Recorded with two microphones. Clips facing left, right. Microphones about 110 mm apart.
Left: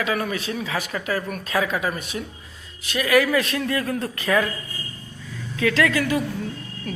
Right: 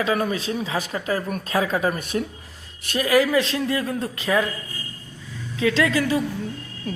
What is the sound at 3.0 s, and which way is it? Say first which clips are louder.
Speech: right 1 dB; 25° right (ahead or behind).